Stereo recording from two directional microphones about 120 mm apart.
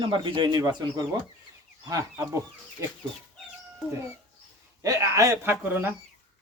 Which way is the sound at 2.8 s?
25° right (ahead or behind).